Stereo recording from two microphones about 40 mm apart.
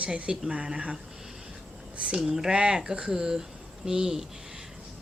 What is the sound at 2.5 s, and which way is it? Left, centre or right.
A woman's voice, right.